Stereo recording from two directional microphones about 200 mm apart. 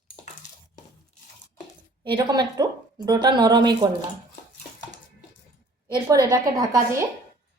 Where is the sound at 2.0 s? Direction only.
20° right (ahead or behind).